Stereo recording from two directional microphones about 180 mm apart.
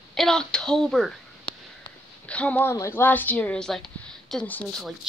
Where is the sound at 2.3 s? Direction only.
5° left (ahead or behind).